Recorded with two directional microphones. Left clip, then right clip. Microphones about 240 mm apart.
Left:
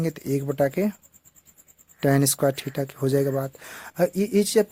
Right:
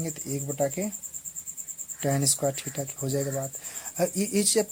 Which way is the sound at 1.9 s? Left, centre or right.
Left.